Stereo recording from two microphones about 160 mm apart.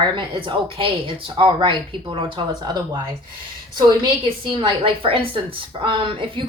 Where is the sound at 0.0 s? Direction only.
30° right (ahead or behind).